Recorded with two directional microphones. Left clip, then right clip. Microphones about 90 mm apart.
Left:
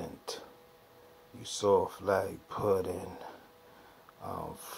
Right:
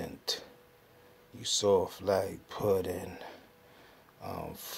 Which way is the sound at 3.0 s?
20° right (ahead or behind).